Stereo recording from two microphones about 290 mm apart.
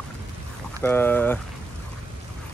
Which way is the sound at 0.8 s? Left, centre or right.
Centre.